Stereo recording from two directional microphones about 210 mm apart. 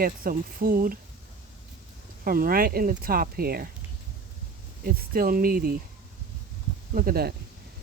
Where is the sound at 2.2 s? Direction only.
45° right (ahead or behind).